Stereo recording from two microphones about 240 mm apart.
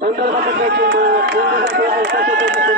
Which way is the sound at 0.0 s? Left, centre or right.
Right.